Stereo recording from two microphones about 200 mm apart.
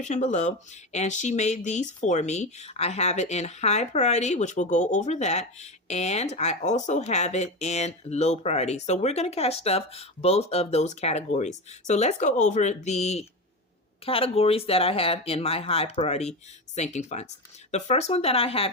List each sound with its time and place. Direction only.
0.0 s speech: 35° left (ahead or behind)